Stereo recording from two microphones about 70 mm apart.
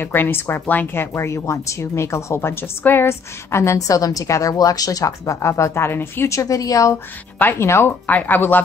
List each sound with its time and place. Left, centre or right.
0.0 s speech: left
1.1 s a woman's voice: left
6.3 s speech: left
7.3 s speech: left
8.1 s speech: left